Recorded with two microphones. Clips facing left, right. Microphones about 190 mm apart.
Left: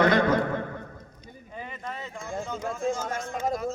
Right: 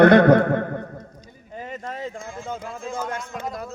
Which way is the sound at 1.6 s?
45° right (ahead or behind).